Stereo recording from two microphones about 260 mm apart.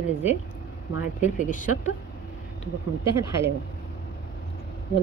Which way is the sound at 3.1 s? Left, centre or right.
Centre.